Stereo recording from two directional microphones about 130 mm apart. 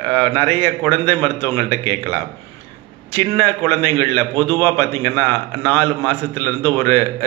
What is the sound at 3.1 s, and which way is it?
A man's voice, 15° left (ahead or behind).